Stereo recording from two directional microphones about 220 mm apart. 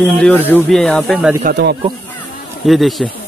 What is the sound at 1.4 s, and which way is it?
Speech, 45° right (ahead or behind).